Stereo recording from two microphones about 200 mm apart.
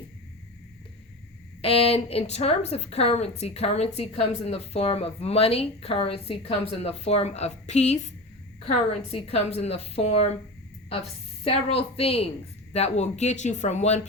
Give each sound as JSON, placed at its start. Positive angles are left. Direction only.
{"t": 1.6, "sound": "a woman's voice", "side_deg": 30}
{"t": 11.4, "sound": "a woman's voice", "side_deg": 30}